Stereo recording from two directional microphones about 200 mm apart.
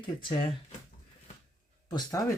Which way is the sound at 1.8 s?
20° left (ahead or behind).